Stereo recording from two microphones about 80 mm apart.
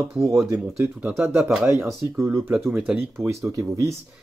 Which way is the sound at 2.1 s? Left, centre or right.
Right.